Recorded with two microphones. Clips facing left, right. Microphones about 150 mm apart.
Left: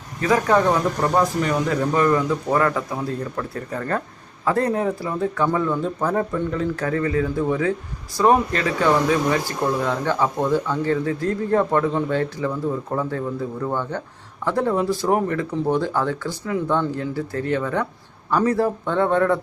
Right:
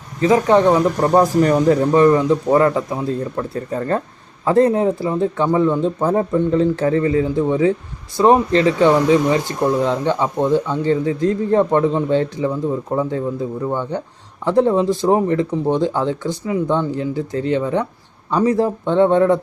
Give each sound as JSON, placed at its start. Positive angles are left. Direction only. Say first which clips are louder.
{"t": 0.2, "sound": "speech", "louder": "right 5 dB", "side_deg": -25}